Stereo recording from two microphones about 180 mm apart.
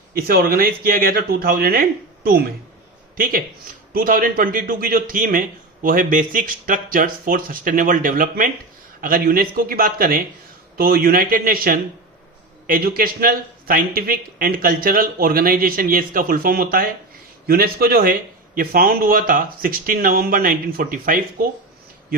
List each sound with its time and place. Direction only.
0.1 s speech: 60° right (ahead or behind)
3.9 s a man's voice: 50° right (ahead or behind)